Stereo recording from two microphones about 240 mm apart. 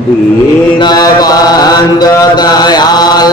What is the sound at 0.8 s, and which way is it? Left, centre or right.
A man's voice, centre.